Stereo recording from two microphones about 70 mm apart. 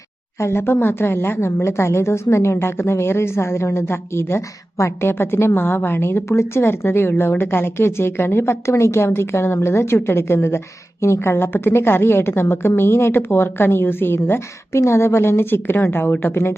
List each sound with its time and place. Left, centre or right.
0.3 s a woman's voice: left